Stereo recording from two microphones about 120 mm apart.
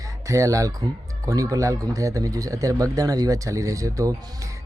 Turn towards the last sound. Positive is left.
turn(degrees=-30)  # may be behind; listen again after turning